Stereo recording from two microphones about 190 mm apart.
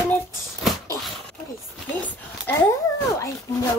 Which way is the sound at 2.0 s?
10° left (ahead or behind).